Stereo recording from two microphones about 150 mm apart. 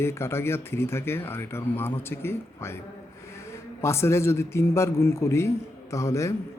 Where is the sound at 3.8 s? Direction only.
15° left (ahead or behind).